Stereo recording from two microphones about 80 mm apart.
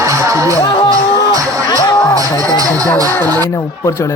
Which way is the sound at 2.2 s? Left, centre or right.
Right.